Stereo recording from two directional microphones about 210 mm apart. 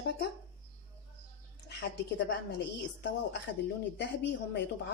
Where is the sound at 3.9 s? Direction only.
55° left (ahead or behind).